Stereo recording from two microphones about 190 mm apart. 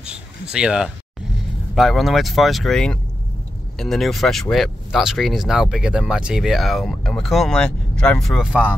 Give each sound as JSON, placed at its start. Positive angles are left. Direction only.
{"t": 0.0, "sound": "speech", "side_deg": -5}